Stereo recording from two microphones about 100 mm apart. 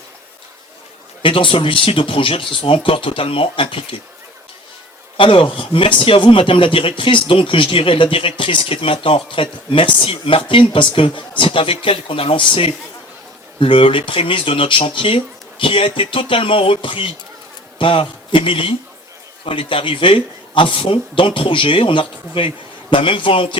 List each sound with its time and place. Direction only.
1.2 s speech: 60° left (ahead or behind)
5.1 s speech: 60° left (ahead or behind)